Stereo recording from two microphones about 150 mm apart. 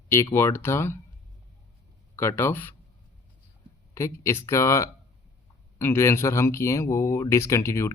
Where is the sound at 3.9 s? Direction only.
20° left (ahead or behind).